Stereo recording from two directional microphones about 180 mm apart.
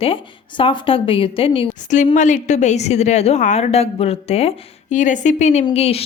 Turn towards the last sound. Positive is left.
turn(degrees=35)  # may be behind; listen again after turning